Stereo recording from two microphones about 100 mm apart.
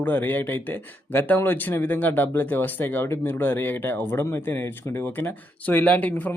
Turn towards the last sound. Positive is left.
turn(degrees=15)  # may be behind; listen again after turning